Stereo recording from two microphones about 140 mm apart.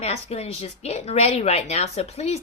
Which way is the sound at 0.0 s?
50° left (ahead or behind).